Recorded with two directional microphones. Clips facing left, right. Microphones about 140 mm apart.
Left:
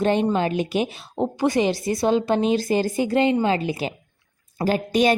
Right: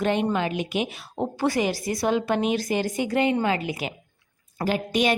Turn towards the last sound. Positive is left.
turn(degrees=35)  # may be behind; listen again after turning